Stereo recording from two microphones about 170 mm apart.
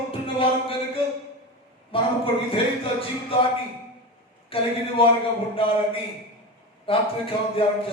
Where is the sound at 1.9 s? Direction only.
30° left (ahead or behind).